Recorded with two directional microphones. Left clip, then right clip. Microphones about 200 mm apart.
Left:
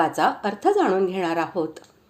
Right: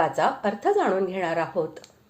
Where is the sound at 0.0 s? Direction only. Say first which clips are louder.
Left 2 dB; 30° left (ahead or behind).